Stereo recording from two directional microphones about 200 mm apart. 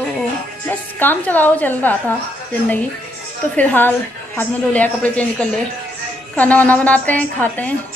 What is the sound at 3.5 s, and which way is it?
A woman's voice, 10° left (ahead or behind).